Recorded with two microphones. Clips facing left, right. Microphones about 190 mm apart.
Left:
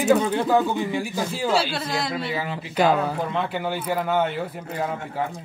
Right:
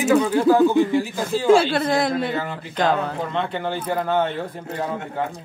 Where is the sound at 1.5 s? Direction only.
50° right (ahead or behind).